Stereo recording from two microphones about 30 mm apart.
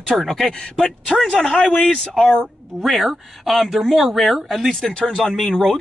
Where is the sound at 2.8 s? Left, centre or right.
Centre.